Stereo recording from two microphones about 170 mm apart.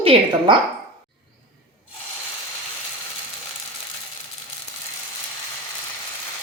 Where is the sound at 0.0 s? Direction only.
35° right (ahead or behind).